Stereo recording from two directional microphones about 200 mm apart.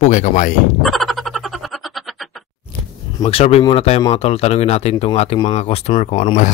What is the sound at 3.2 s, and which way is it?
Speech, 30° left (ahead or behind).